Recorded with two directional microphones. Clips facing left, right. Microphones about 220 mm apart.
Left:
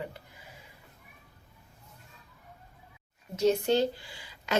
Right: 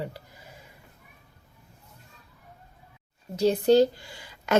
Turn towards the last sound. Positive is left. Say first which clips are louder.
# right 6 dB
turn(degrees=-45)  # may be behind; listen again after turning